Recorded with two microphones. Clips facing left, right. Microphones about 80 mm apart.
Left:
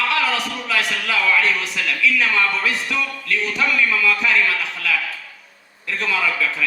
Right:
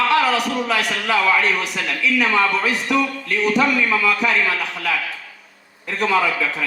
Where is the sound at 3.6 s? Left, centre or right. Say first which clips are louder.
Right 2 dB; right.